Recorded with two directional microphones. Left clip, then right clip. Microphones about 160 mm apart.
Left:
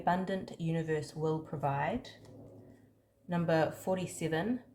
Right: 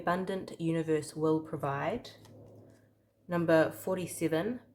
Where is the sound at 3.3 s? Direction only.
35° right (ahead or behind).